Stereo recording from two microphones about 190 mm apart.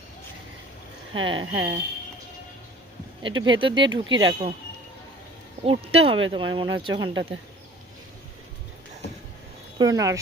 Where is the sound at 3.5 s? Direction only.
25° right (ahead or behind).